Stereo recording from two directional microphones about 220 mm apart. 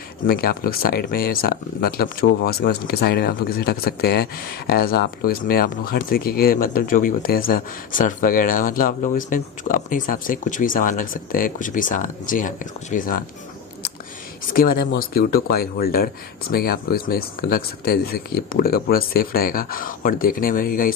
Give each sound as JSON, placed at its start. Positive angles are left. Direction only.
{"t": 0.3, "sound": "speech", "side_deg": 45}
{"t": 14.4, "sound": "speech", "side_deg": 40}